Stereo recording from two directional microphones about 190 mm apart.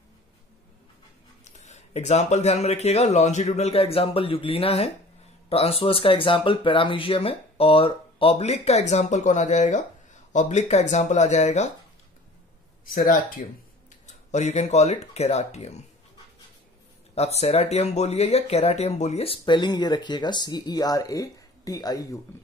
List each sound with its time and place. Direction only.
1.4 s speech: 35° left (ahead or behind)
12.9 s speech: 45° left (ahead or behind)
17.1 s speech: 35° left (ahead or behind); by 22.2 s 20° left (ahead or behind)